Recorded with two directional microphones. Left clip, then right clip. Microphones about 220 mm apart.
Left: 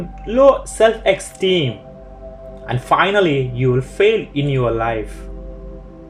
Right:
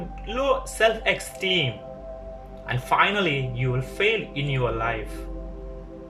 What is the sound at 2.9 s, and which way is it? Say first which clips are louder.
Speech: left 7 dB; 30° left (ahead or behind).